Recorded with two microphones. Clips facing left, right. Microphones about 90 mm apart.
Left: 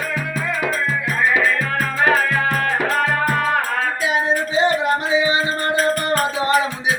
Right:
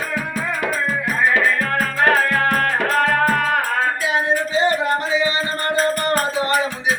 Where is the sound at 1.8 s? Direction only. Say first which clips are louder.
Even; 5° left (ahead or behind).